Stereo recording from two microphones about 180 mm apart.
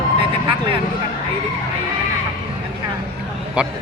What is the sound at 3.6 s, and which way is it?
Speech, 5° right (ahead or behind).